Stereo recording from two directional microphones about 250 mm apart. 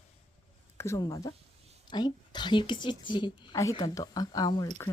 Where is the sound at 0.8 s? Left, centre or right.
Centre.